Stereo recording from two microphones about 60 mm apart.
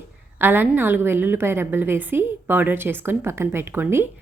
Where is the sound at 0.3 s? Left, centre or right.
Right.